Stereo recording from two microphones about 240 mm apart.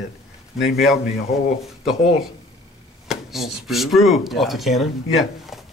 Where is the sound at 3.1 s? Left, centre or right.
Centre.